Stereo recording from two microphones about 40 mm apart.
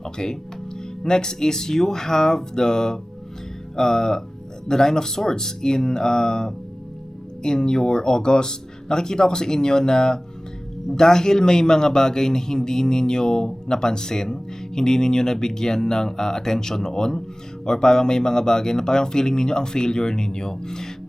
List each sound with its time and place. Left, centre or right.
0.0 s a man's voice: centre